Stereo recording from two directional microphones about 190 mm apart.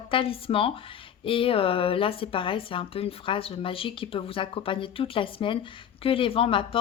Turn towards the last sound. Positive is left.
turn(degrees=30)  # may be behind; listen again after turning